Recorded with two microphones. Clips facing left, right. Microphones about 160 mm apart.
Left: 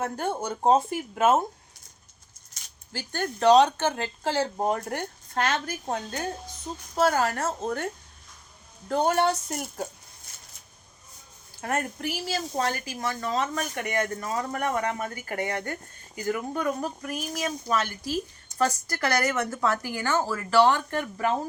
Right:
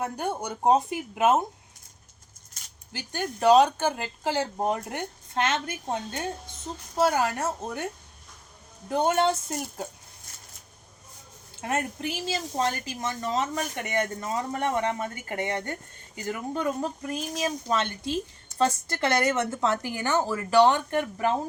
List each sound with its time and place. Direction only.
0.0 s speech: 15° right (ahead or behind)
2.9 s speech: 15° right (ahead or behind)
6.9 s speech: 15° right (ahead or behind)
8.9 s speech: 20° right (ahead or behind)
11.5 s speech: 20° right (ahead or behind)